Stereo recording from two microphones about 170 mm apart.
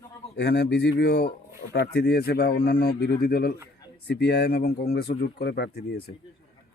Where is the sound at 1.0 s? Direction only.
75° left (ahead or behind).